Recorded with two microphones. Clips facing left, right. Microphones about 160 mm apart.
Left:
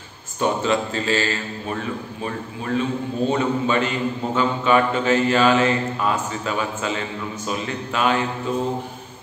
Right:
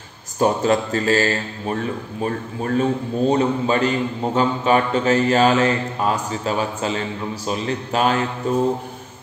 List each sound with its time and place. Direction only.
0.4 s speech: 40° right (ahead or behind)